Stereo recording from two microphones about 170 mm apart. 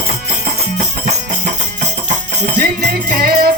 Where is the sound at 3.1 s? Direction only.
65° right (ahead or behind).